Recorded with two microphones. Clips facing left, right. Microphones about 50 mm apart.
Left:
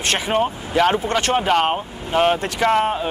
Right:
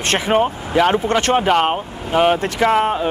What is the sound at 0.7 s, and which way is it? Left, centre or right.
Speech, centre.